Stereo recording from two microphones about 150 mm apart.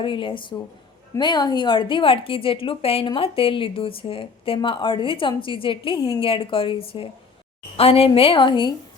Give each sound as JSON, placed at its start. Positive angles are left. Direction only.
{"t": 0.0, "sound": "a woman's voice", "side_deg": 35}